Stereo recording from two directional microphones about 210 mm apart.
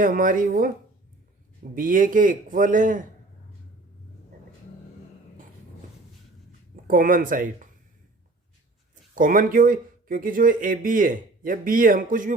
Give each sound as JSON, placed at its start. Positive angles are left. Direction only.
{"t": 0.0, "sound": "speech", "side_deg": -40}
{"t": 1.7, "sound": "speech", "side_deg": -40}
{"t": 6.8, "sound": "speech", "side_deg": -40}
{"t": 9.1, "sound": "speech", "side_deg": -40}